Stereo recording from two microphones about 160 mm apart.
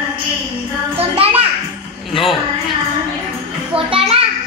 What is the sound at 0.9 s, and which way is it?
Music, 40° right (ahead or behind).